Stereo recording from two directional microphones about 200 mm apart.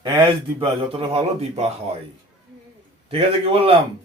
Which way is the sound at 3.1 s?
30° right (ahead or behind).